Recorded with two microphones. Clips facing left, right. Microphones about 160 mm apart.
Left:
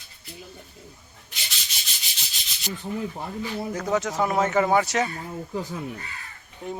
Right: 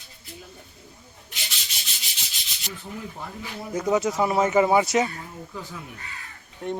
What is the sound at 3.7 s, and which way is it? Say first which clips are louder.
Speech: right 3 dB; 10° right (ahead or behind).